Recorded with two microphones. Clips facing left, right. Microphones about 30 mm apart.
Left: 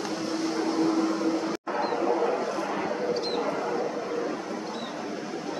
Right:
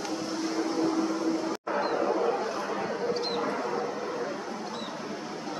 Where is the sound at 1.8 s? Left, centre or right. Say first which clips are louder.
Left 2 dB; centre.